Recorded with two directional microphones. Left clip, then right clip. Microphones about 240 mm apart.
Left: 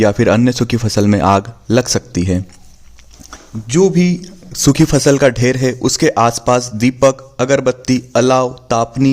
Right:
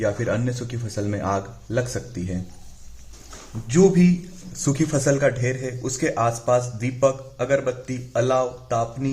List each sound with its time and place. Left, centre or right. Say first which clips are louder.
0.0 s speech: left 12 dB; left
3.7 s speech: left 5 dB; left